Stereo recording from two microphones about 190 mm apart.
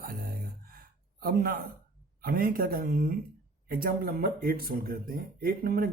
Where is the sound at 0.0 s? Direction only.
50° right (ahead or behind).